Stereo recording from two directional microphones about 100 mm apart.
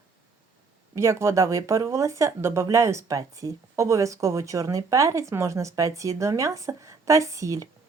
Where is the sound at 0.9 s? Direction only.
30° right (ahead or behind).